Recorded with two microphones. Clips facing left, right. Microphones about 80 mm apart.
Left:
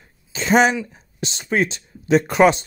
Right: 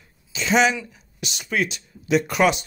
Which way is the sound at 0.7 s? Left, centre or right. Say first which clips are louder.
Left 6 dB; left.